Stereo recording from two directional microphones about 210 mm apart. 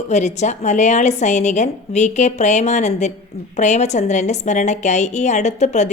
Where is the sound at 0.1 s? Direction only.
35° left (ahead or behind).